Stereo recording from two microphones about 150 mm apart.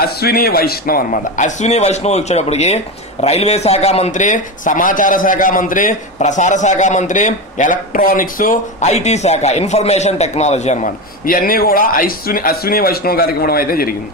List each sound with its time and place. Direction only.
0.2 s a man's voice: 90° left; by 8.8 s 65° left (ahead or behind)
8.8 s a man's voice: 50° left (ahead or behind); by 13.9 s 80° left